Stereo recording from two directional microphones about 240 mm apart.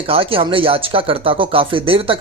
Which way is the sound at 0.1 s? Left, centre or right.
Right.